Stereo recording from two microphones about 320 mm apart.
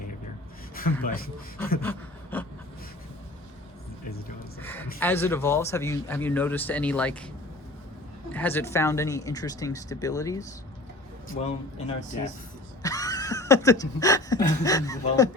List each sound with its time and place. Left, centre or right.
1.0 s a man's voice: left
1.8 s a sound: centre
4.6 s speech: centre
8.3 s a man's voice: centre
12.8 s a sound: centre
14.6 s speech: centre